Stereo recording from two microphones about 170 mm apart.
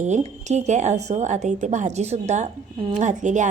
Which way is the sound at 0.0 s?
45° right (ahead or behind).